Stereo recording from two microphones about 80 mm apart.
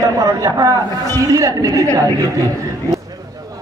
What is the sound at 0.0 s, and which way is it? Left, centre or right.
A man's voice, right.